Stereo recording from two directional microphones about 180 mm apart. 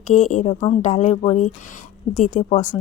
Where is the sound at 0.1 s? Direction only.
45° left (ahead or behind).